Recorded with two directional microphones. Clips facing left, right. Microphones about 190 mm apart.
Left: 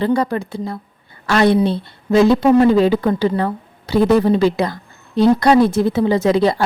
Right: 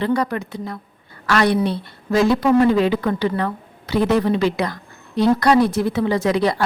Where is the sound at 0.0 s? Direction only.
30° left (ahead or behind).